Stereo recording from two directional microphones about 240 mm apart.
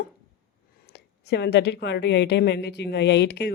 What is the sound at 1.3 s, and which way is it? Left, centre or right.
Speech, left.